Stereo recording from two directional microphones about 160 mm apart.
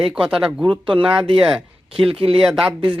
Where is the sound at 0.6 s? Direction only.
30° right (ahead or behind).